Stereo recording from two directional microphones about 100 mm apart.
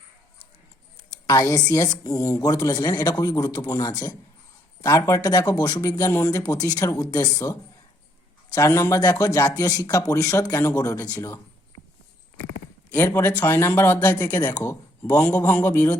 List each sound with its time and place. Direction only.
1.3 s speech: 35° left (ahead or behind)
12.9 s speech: 20° left (ahead or behind)